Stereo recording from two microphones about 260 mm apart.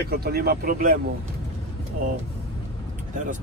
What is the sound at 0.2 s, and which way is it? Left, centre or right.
Speech, right.